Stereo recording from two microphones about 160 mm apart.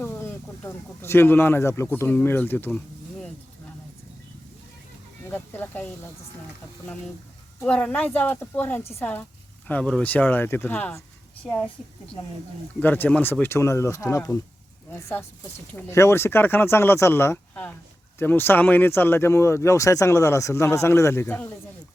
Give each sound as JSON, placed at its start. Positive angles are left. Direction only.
{"t": 0.0, "sound": "speech", "side_deg": 10}
{"t": 5.3, "sound": "speech", "side_deg": 10}
{"t": 7.6, "sound": "a woman's voice", "side_deg": 5}
{"t": 15.7, "sound": "speech", "side_deg": 15}